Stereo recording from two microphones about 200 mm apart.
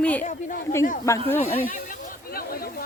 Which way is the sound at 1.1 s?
15° left (ahead or behind).